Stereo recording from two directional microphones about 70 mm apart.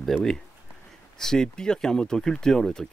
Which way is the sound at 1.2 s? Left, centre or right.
Centre.